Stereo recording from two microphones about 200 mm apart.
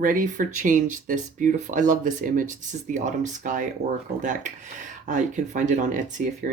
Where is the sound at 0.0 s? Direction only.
40° right (ahead or behind).